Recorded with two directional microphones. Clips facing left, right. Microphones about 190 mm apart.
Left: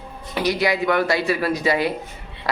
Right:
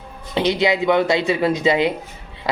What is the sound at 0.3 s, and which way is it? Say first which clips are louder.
Speech: right 3 dB; 25° right (ahead or behind).